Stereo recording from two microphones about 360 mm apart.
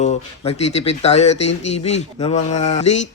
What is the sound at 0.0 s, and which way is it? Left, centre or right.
Speech, centre.